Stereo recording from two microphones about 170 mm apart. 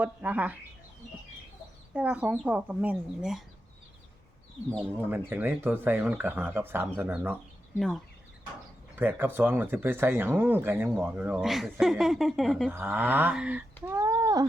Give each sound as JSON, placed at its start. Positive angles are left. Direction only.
{"t": 0.0, "sound": "speech", "side_deg": -10}
{"t": 1.9, "sound": "speech", "side_deg": -10}
{"t": 5.1, "sound": "speech", "side_deg": -10}
{"t": 7.8, "sound": "speech", "side_deg": 0}
{"t": 9.0, "sound": "speech", "side_deg": -10}
{"t": 12.7, "sound": "speech", "side_deg": -10}
{"t": 13.8, "sound": "a sound", "side_deg": -20}